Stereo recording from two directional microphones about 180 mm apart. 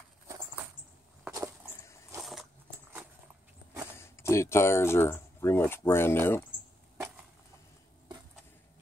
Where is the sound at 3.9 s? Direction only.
15° left (ahead or behind).